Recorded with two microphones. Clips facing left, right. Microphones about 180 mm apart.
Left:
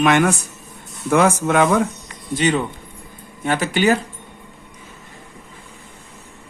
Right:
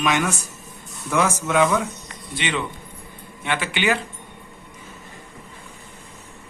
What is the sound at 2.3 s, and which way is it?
Speech, 40° left (ahead or behind).